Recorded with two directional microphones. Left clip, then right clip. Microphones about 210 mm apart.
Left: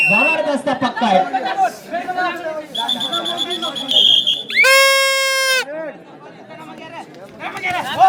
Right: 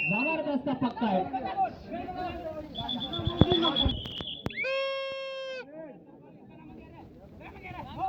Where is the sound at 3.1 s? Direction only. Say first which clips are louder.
Left 7 dB; 70° left (ahead or behind).